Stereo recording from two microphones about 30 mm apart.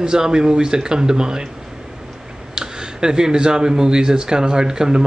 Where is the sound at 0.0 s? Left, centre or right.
Right.